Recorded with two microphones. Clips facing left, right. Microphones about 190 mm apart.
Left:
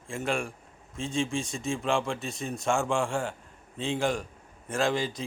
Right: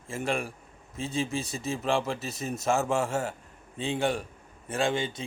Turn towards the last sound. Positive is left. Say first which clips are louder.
# left 1 dB
turn(degrees=0)  # may be behind; listen again after turning